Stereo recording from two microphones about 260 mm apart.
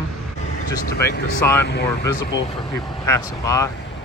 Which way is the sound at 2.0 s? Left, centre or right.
Centre.